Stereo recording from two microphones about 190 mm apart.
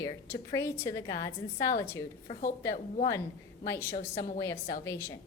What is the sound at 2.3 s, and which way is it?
Speech, 45° left (ahead or behind).